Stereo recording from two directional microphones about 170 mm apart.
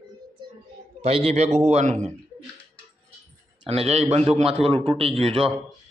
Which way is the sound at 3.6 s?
40° right (ahead or behind).